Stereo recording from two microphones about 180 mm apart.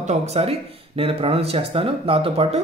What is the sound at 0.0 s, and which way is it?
Speech, 40° right (ahead or behind).